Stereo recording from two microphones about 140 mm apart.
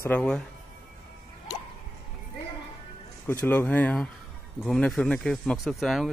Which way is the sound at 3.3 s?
15° left (ahead or behind).